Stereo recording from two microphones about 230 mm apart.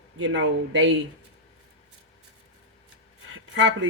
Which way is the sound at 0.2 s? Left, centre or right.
Right.